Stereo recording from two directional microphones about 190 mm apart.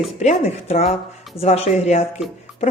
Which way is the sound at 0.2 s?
35° left (ahead or behind).